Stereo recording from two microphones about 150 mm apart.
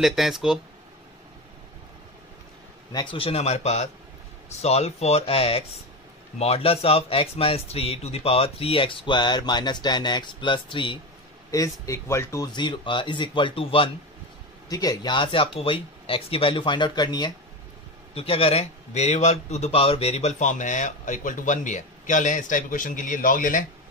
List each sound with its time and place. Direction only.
0.0 s speech: centre (ahead or behind)
2.9 s a man's voice: 25° left (ahead or behind)
3.2 s speech: 40° left (ahead or behind)
11.5 s speech: 20° left (ahead or behind)
12.5 s speech: 30° left (ahead or behind)
14.7 s speech: 25° left (ahead or behind)
18.1 s a man's voice: 40° left (ahead or behind); by 23.6 s 65° left (ahead or behind)